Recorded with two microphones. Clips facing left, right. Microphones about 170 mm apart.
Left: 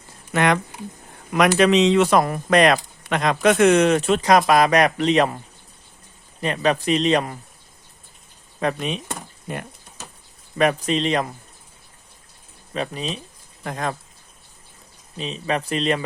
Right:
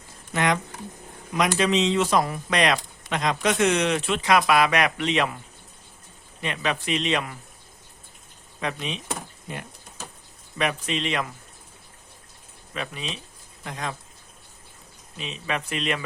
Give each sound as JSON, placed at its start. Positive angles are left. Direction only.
{"t": 0.3, "sound": "speech", "side_deg": 60}
{"t": 6.4, "sound": "speech", "side_deg": 40}
{"t": 8.6, "sound": "speech", "side_deg": 50}
{"t": 10.6, "sound": "speech", "side_deg": 40}
{"t": 12.7, "sound": "speech", "side_deg": 35}
{"t": 13.7, "sound": "speech", "side_deg": 50}
{"t": 15.2, "sound": "speech", "side_deg": 35}